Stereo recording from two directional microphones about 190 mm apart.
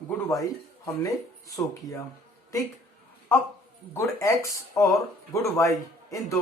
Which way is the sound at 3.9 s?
15° left (ahead or behind).